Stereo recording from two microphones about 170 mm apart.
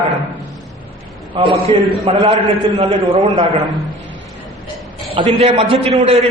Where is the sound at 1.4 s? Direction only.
30° right (ahead or behind).